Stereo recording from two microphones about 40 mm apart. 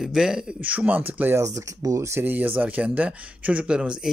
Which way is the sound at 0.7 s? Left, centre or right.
Right.